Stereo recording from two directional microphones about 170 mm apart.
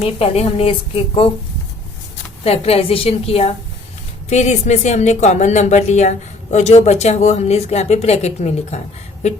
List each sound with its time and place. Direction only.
0.0 s speech: 35° left (ahead or behind)
2.4 s speech: 35° left (ahead or behind)